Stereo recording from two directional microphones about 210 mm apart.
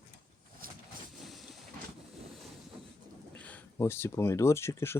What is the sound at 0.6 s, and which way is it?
Vehicle, 45° right (ahead or behind).